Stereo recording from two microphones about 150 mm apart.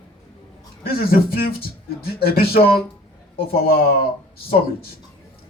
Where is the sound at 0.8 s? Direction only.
90° left.